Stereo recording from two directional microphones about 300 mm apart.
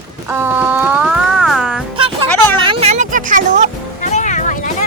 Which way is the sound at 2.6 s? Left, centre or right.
Centre.